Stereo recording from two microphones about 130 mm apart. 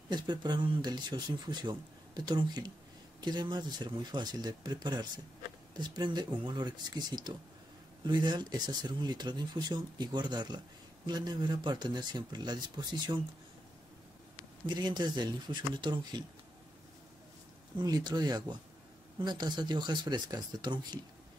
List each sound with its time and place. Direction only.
0.1 s speech: 35° right (ahead or behind)
14.7 s speech: 35° right (ahead or behind)
17.7 s speech: 30° right (ahead or behind)